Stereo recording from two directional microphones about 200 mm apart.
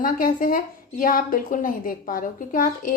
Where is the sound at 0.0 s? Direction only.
45° left (ahead or behind).